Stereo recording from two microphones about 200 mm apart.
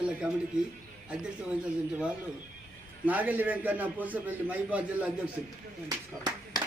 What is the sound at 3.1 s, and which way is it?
A man's voice, 10° right (ahead or behind).